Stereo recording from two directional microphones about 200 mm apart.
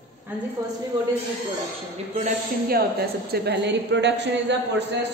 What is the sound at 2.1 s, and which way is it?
A woman's voice, 45° right (ahead or behind).